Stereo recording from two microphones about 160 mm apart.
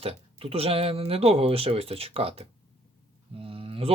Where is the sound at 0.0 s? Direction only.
40° right (ahead or behind).